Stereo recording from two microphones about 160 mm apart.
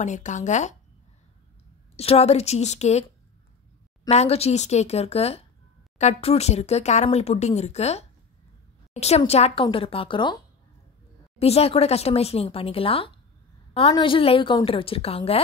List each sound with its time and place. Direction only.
0.0 s speech: 50° left (ahead or behind)
2.0 s speech: 40° left (ahead or behind)
4.1 s speech: 40° left (ahead or behind)